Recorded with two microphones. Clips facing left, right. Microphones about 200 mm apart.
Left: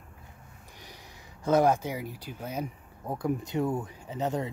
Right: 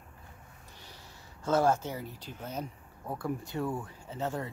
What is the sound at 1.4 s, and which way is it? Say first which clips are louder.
Speech: left 3 dB; 15° left (ahead or behind).